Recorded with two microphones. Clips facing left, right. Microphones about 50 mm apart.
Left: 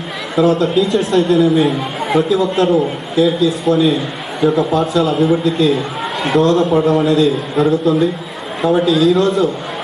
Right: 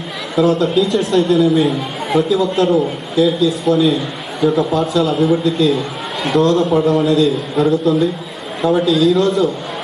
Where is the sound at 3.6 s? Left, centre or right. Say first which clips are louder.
Left 1 dB; centre.